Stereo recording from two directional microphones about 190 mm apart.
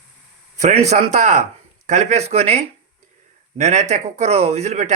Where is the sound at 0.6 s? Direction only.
35° right (ahead or behind).